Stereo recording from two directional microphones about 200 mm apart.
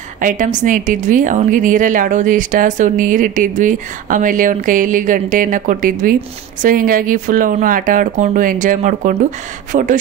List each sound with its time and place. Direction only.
0.2 s a woman's voice: 40° right (ahead or behind)